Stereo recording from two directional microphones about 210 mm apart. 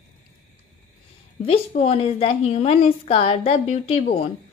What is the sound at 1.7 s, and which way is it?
A woman's voice, 30° left (ahead or behind).